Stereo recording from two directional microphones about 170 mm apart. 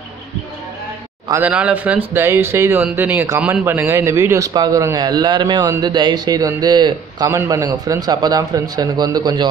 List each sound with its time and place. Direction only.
1.3 s speech: 10° right (ahead or behind); by 9.5 s 25° right (ahead or behind)